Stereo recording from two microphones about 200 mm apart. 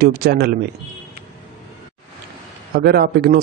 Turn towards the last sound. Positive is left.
turn(degrees=-50)  # may be behind; listen again after turning